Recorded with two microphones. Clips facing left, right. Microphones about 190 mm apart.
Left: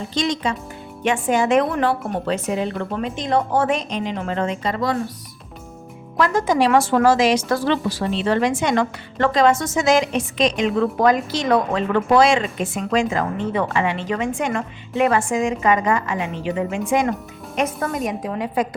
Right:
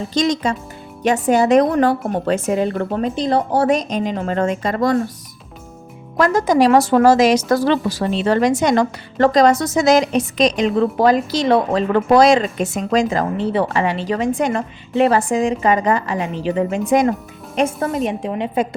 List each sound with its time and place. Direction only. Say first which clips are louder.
0.1 s a woman's voice: right 4 dB; 40° right (ahead or behind)
6.1 s a woman's voice: right 4 dB; 40° right (ahead or behind)
17.6 s a woman's voice: right 4 dB; 30° right (ahead or behind)